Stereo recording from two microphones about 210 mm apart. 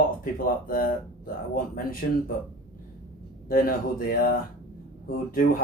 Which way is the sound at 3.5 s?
45° left (ahead or behind).